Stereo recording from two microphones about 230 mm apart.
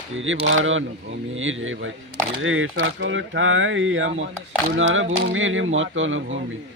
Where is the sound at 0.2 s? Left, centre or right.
Right.